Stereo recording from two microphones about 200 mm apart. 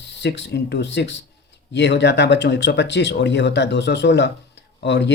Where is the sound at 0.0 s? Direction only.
60° left (ahead or behind).